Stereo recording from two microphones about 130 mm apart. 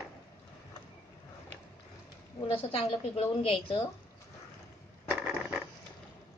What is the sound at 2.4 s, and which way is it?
A woman's voice, 45° left (ahead or behind).